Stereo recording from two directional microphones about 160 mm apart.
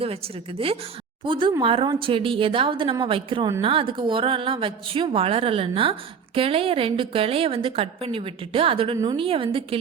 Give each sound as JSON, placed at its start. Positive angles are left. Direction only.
{"t": 1.2, "sound": "speech", "side_deg": -30}